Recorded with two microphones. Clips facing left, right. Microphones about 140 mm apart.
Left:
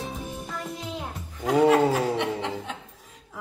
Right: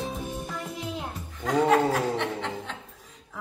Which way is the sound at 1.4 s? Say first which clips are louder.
Left 3 dB; 5° left (ahead or behind).